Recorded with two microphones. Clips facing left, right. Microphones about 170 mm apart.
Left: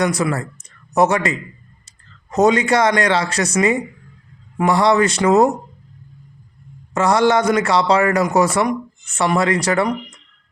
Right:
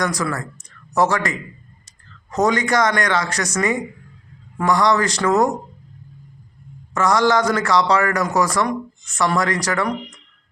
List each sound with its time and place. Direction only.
0.0 s speech: 25° left (ahead or behind)
2.3 s a man's voice: 25° left (ahead or behind)
6.9 s a man's voice: 25° left (ahead or behind)